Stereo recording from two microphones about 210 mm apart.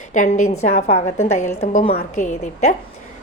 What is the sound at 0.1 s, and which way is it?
A woman's voice, 35° left (ahead or behind).